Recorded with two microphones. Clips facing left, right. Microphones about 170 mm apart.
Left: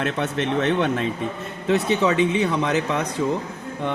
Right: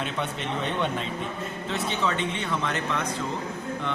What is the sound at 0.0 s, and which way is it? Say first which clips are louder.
Speech: left 7 dB; 90° left.